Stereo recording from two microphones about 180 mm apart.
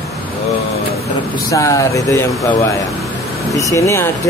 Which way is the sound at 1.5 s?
20° left (ahead or behind).